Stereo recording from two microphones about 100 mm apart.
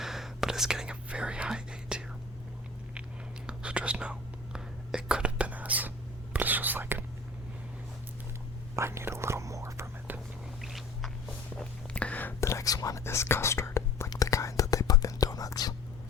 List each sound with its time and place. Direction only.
0.0 s whispering: 5° right (ahead or behind)
3.4 s whispering: 10° right (ahead or behind)
8.7 s whispering: 25° right (ahead or behind)
10.6 s vehicle: centre (ahead or behind)
11.5 s whispering: 10° left (ahead or behind)
12.4 s whispering: 30° left (ahead or behind)